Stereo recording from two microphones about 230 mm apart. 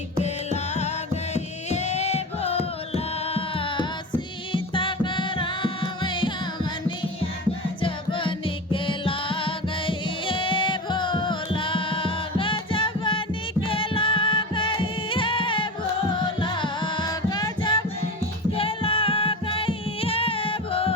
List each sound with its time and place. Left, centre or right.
0.2 s music: left
7.8 s music: left